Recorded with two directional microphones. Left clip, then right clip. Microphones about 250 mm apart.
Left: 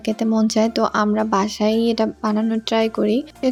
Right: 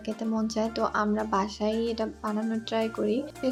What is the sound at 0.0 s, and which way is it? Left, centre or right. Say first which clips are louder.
A woman's voice: left 11 dB; left.